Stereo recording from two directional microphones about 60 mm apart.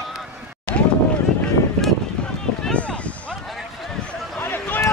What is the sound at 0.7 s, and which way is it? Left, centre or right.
Boat, left.